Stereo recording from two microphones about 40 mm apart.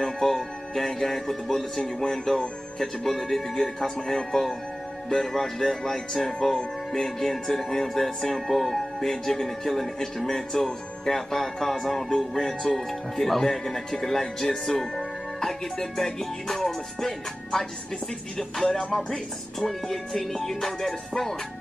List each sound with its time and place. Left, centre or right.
0.0 s speech: centre
2.8 s speech: centre